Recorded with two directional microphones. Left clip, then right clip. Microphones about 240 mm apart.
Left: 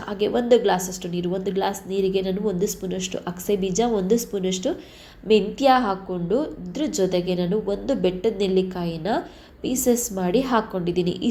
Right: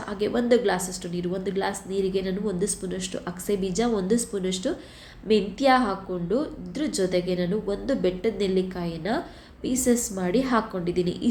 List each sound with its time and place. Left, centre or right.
0.1 s a woman's voice: centre